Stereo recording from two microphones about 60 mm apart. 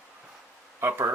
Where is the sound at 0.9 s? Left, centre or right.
Right.